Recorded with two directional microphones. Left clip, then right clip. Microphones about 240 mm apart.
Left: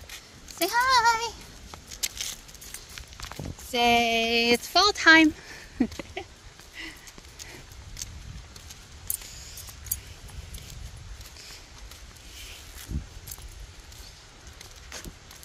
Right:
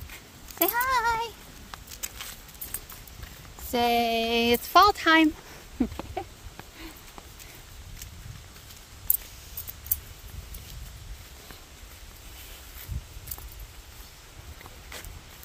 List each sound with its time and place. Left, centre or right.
0.6 s speech: centre
3.7 s speech: centre
6.2 s a sound: centre